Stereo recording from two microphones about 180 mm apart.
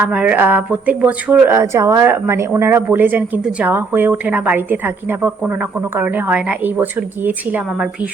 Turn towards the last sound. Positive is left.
turn(degrees=-5)  # may be behind; listen again after turning